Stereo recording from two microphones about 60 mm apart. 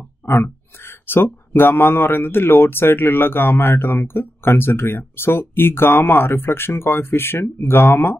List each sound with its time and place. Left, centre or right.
0.3 s speech: left